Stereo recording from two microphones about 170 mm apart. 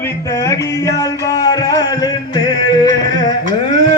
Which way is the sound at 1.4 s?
25° left (ahead or behind).